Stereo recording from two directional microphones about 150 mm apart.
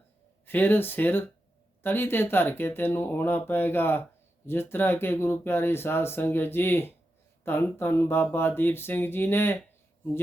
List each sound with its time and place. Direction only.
0.4 s speech: 15° left (ahead or behind)